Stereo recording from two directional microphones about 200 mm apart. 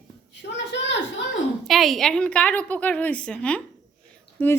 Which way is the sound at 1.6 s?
Centre (ahead or behind).